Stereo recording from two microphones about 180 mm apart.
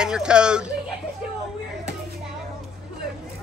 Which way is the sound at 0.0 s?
5° right (ahead or behind).